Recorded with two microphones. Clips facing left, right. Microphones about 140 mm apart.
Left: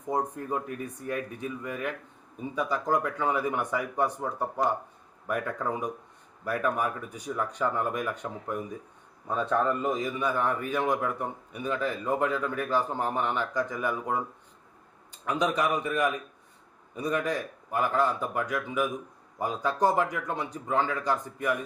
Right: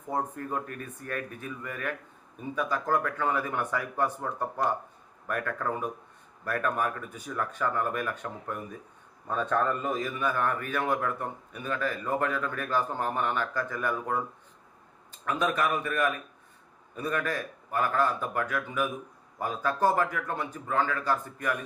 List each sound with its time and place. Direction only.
0.1 s a man's voice: 15° left (ahead or behind)